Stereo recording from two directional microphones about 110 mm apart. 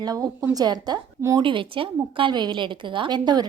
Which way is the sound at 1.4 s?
50° right (ahead or behind).